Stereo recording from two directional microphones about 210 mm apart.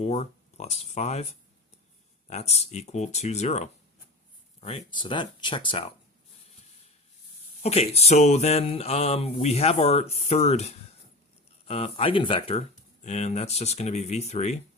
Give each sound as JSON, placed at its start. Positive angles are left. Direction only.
{"t": 0.0, "sound": "speech", "side_deg": 30}
{"t": 7.6, "sound": "speech", "side_deg": 30}
{"t": 11.7, "sound": "speech", "side_deg": 30}